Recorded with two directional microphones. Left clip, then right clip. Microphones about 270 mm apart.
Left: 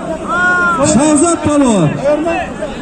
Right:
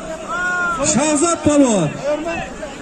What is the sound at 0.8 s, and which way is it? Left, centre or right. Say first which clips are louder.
A man's voice: left 6 dB; right.